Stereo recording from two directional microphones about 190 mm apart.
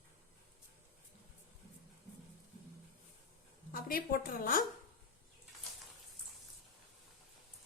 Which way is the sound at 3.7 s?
50° left (ahead or behind).